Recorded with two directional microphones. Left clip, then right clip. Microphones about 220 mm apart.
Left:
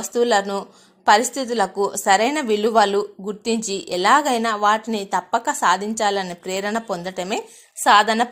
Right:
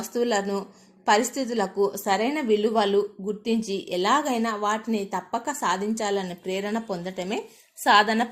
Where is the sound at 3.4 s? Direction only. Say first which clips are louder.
Left 5 dB; 45° left (ahead or behind).